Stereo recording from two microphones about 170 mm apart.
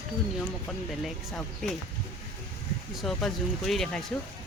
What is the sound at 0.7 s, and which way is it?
Speech, centre (ahead or behind).